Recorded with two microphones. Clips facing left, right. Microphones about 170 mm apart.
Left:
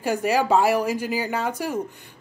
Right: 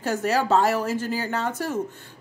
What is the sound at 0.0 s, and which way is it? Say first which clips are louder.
Speech: left 2 dB; 10° left (ahead or behind).